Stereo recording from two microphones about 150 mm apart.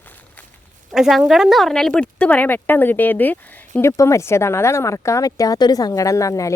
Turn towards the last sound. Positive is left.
turn(degrees=20)  # may be behind; listen again after turning